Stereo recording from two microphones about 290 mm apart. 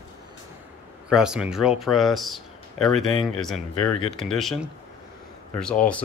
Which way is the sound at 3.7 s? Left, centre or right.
Left.